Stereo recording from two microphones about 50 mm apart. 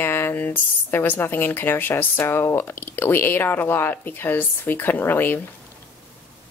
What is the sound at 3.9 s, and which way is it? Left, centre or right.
Speech, left.